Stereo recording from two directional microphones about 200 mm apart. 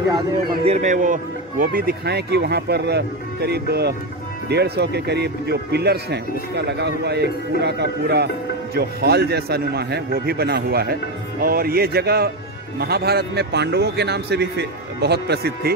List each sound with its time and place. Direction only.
0.7 s a man's voice: 35° right (ahead or behind); by 15.7 s 55° right (ahead or behind)